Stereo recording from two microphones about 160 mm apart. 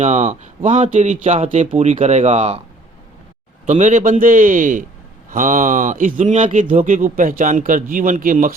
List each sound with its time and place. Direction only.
0.0 s speech: 50° right (ahead or behind)
3.7 s speech: 50° right (ahead or behind)